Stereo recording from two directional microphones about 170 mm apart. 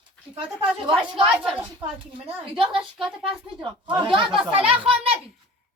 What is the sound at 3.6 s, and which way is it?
A woman's voice, 30° right (ahead or behind).